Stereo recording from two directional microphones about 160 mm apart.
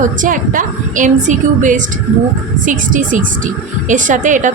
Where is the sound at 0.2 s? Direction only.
55° right (ahead or behind).